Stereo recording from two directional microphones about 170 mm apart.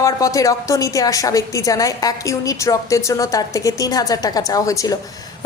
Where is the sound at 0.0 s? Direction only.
20° left (ahead or behind).